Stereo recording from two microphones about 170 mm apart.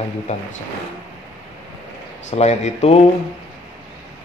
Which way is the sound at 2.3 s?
40° left (ahead or behind).